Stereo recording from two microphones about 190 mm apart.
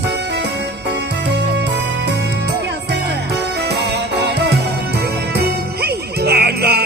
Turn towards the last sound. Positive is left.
turn(degrees=-55)  # may be behind; listen again after turning